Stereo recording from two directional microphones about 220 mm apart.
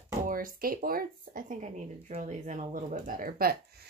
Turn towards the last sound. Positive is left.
turn(degrees=-40)  # may be behind; listen again after turning